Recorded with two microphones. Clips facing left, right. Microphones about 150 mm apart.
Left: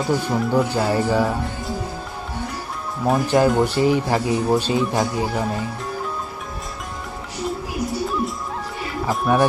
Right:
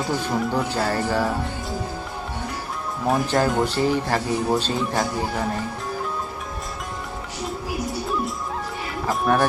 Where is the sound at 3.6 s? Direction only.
15° left (ahead or behind).